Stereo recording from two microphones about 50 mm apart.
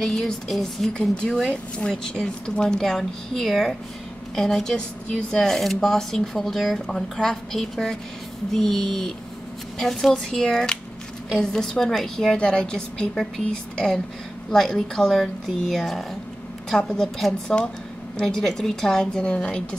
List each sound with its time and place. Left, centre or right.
0.0 s speech: centre
1.1 s speech: centre
12.4 s a woman's voice: centre